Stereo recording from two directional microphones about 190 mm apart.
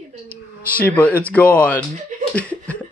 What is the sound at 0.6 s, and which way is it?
Speech, 10° left (ahead or behind).